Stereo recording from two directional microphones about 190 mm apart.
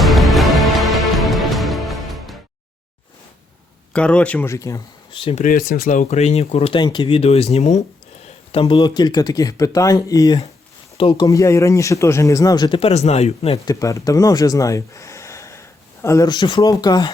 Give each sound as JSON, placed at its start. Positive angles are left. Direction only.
{"t": 0.0, "sound": "music", "side_deg": 0}
{"t": 3.9, "sound": "speech", "side_deg": 5}
{"t": 5.2, "sound": "speech", "side_deg": 40}
{"t": 8.5, "sound": "speech", "side_deg": 25}
{"t": 13.7, "sound": "speech", "side_deg": 15}